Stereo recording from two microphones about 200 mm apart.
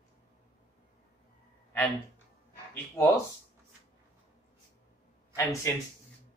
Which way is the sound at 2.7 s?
15° left (ahead or behind).